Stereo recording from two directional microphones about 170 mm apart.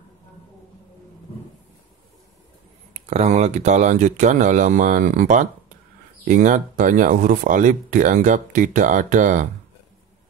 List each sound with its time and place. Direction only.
2.9 s speech: 40° right (ahead or behind)